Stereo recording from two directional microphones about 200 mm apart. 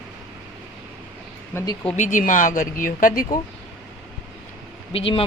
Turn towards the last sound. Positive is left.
turn(degrees=25)  # may be behind; listen again after turning